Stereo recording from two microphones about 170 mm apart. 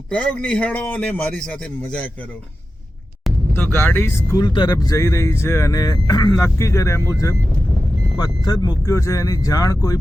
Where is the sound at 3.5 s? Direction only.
15° left (ahead or behind).